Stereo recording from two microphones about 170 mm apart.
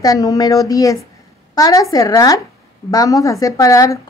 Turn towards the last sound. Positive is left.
turn(degrees=20)  # may be behind; listen again after turning